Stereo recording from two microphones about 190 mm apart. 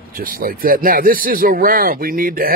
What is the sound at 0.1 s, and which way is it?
Speech, 50° right (ahead or behind).